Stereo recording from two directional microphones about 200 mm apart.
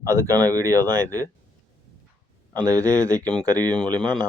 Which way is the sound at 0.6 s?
15° right (ahead or behind).